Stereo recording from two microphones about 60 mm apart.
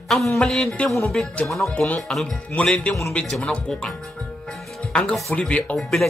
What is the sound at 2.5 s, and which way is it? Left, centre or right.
Speech, centre.